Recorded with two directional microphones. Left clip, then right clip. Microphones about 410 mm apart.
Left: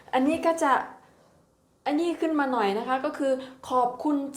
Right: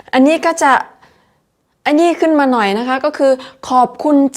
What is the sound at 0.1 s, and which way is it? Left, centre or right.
A woman's voice, right.